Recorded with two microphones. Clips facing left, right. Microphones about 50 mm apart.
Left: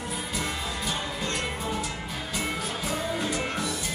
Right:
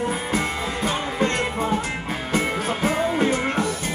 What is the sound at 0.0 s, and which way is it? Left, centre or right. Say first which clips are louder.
Music: right 8 dB; right.